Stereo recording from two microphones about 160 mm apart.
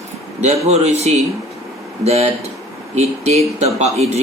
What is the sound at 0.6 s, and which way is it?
Speech, 40° right (ahead or behind).